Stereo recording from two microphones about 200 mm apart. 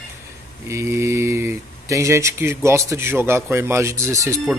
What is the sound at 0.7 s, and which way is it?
Speech, 15° right (ahead or behind).